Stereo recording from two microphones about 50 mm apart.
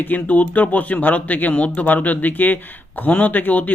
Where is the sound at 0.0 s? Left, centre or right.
Left.